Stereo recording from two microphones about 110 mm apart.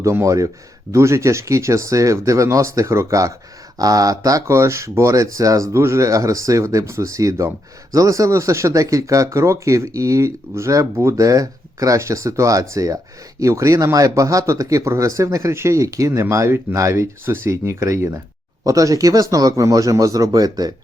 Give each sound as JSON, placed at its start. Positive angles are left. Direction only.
{"t": 0.0, "sound": "speech", "side_deg": -25}